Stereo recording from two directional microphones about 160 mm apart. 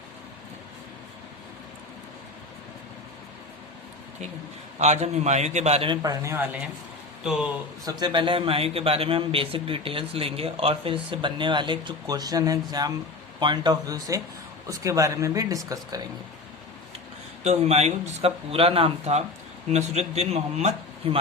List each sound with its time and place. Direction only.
4.8 s a man's voice: 45° right (ahead or behind)
6.0 s speech: 20° right (ahead or behind)
7.9 s a man's voice: 25° right (ahead or behind)
17.4 s a man's voice: 45° right (ahead or behind)